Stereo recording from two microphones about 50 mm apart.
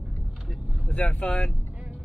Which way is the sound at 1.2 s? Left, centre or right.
Centre.